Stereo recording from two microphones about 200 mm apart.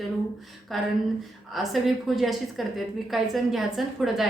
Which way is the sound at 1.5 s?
Centre (ahead or behind).